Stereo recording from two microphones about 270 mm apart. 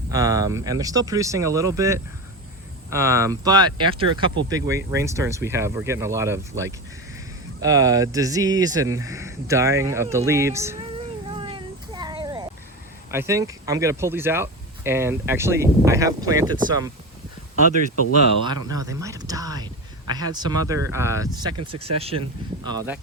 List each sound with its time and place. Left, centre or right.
0.1 s speech: centre
11.3 s a sound: centre
13.1 s speech: centre
18.4 s speech: centre